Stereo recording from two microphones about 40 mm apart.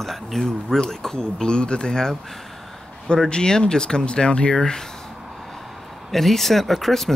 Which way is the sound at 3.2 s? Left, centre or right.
Left.